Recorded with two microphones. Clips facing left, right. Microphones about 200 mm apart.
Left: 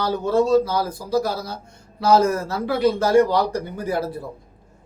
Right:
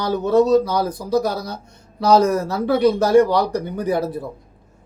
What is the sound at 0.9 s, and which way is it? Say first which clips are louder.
Speech: right 2 dB; 10° left (ahead or behind).